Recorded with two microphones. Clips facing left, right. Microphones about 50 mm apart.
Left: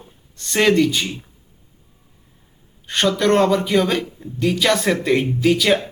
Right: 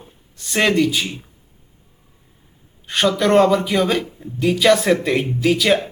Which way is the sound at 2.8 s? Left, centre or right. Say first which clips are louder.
Even; centre.